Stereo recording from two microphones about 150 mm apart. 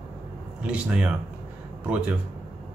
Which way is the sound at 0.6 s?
10° right (ahead or behind).